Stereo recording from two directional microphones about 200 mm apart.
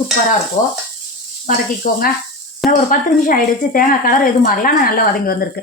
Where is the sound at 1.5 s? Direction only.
45° left (ahead or behind).